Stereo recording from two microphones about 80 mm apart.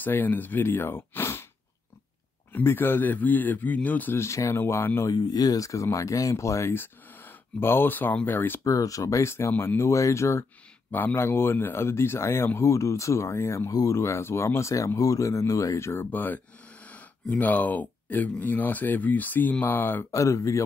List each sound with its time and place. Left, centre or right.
0.0 s a man's voice: left
2.5 s a man's voice: left
4.2 s speech: left
5.0 s speech: left
7.6 s a man's voice: left
8.6 s speech: left
9.5 s a man's voice: left
9.8 s speech: left
10.9 s speech: left
13.7 s speech: left
13.9 s speech: left
15.9 s a man's voice: left
20.1 s speech: left